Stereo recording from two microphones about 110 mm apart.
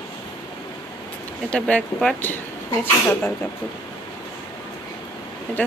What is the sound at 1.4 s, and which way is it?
Speech, 10° left (ahead or behind).